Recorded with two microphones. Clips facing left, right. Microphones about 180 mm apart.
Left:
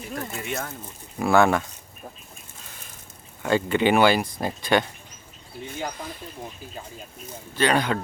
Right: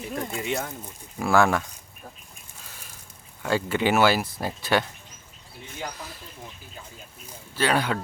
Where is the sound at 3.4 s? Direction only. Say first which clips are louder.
Left 3 dB; 5° right (ahead or behind).